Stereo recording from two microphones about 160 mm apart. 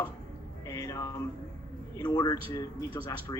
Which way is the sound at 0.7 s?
20° left (ahead or behind).